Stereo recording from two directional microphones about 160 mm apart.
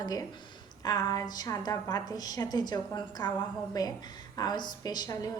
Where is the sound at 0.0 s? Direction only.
25° left (ahead or behind).